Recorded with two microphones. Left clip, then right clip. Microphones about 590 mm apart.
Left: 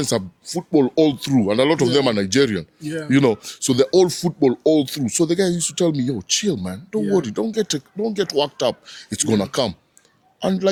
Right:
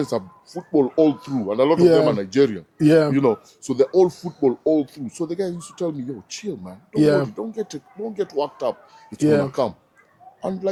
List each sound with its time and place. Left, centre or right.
0.0 s speech: left